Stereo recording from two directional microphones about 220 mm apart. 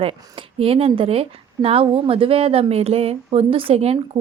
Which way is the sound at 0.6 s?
25° right (ahead or behind).